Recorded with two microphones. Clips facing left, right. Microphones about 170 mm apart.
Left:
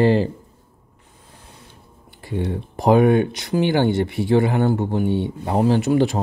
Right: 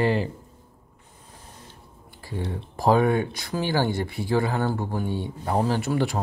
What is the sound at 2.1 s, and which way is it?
Speech, 25° left (ahead or behind).